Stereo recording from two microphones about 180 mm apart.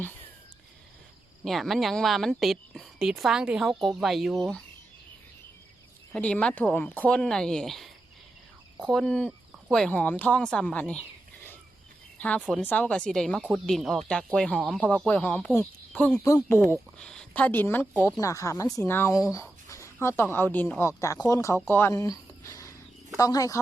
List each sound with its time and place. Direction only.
1.5 s a woman's voice: centre (ahead or behind)
6.1 s a woman's voice: 5° left (ahead or behind)
8.9 s a woman's voice: 5° left (ahead or behind)
12.1 s a woman's voice: 10° left (ahead or behind)